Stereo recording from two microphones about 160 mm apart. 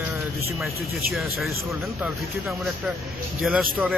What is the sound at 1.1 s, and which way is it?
A man's voice, centre (ahead or behind).